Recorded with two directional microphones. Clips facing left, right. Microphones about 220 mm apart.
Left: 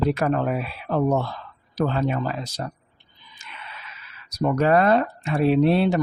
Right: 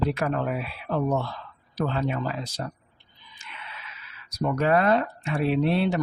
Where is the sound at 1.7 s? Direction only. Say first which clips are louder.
Left 4 dB; 40° left (ahead or behind).